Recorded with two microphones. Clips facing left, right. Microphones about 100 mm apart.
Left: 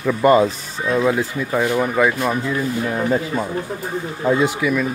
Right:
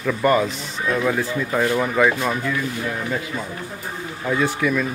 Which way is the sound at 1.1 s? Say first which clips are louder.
Left 2 dB; 10° left (ahead or behind).